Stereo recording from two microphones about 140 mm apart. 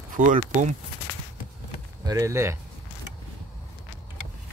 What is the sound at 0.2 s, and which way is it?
Speech, 70° right (ahead or behind).